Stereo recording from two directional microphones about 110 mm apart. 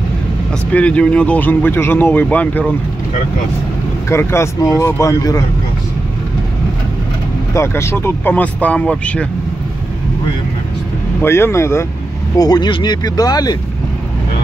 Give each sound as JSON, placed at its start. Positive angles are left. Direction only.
{"t": 0.7, "sound": "speech", "side_deg": 10}
{"t": 4.1, "sound": "speech", "side_deg": 25}
{"t": 7.5, "sound": "speech", "side_deg": 25}
{"t": 11.2, "sound": "speech", "side_deg": 20}
{"t": 12.4, "sound": "speech", "side_deg": 35}